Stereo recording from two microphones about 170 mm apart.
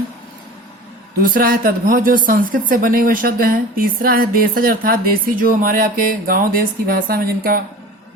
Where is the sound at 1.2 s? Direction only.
55° right (ahead or behind).